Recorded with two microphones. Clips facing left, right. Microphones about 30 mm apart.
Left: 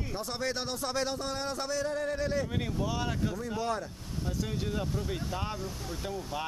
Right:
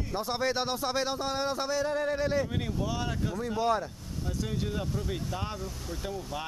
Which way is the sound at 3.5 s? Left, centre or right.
Centre.